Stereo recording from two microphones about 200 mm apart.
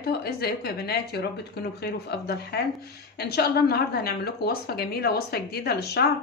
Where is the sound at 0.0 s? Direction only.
50° left (ahead or behind).